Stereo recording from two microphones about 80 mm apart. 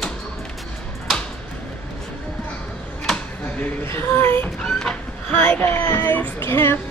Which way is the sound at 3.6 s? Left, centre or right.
Left.